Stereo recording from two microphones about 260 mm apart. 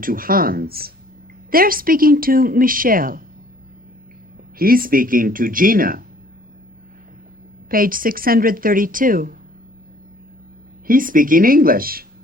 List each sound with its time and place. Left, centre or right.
0.0 s speech: right
4.5 s speech: right
7.7 s speech: right
10.8 s speech: right